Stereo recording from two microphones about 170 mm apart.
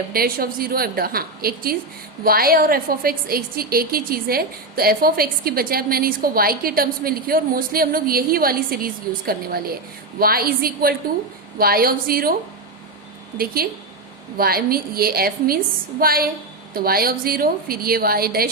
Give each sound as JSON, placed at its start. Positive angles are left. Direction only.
{"t": 0.1, "sound": "a woman's voice", "side_deg": -60}
{"t": 13.4, "sound": "a woman's voice", "side_deg": -60}